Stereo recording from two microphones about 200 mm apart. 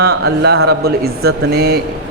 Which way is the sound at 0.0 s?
55° right (ahead or behind).